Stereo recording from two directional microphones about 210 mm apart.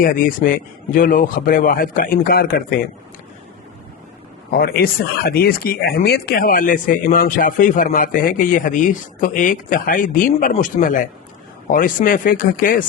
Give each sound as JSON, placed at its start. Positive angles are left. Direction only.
{"t": 0.0, "sound": "speech", "side_deg": 40}
{"t": 4.5, "sound": "speech", "side_deg": 45}